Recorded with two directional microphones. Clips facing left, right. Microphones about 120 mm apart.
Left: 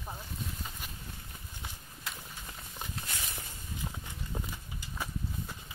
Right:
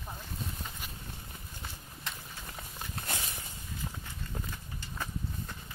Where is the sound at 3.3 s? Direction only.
15° left (ahead or behind).